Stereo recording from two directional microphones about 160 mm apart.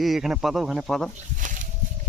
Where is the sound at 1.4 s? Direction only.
55° right (ahead or behind).